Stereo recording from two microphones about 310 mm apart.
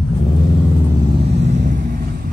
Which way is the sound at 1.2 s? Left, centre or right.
Right.